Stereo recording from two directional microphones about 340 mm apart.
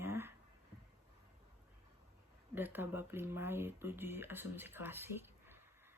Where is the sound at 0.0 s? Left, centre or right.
Centre.